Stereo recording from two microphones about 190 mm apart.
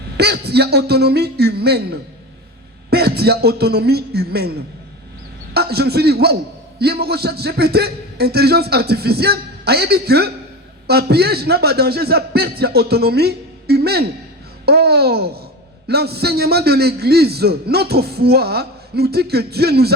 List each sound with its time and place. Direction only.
0.2 s a man's voice: 60° right (ahead or behind)
5.5 s a man's voice: 55° right (ahead or behind)